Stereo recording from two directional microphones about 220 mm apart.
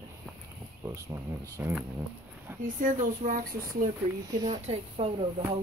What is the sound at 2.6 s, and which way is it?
Speech, 35° right (ahead or behind).